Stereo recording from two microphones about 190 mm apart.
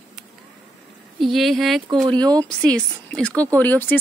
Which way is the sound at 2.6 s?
5° left (ahead or behind).